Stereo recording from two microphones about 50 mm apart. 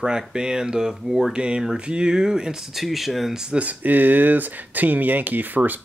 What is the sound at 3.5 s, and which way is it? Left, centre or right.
Speech, right.